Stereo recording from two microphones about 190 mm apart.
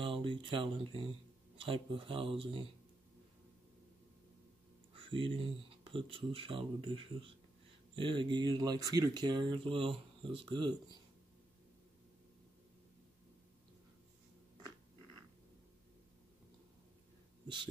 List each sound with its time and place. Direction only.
0.0 s speech: 25° right (ahead or behind)
4.9 s speech: 30° right (ahead or behind)